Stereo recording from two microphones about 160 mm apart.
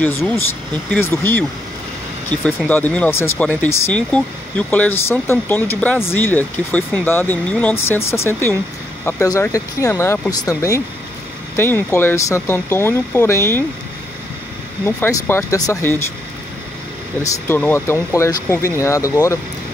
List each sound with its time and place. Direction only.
0.9 s speech: 10° left (ahead or behind)
2.4 s speech: 10° left (ahead or behind)
15.0 s speech: 15° left (ahead or behind)
17.2 s speech: 20° left (ahead or behind)